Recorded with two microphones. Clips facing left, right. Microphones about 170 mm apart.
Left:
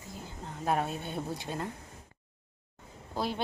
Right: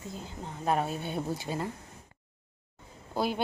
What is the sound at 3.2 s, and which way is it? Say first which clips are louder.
Speech: right 3 dB; 5° right (ahead or behind).